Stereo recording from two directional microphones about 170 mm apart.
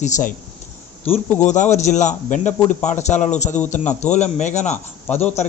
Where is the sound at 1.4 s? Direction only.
45° left (ahead or behind).